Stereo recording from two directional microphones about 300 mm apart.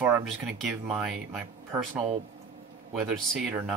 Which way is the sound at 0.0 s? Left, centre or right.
Centre.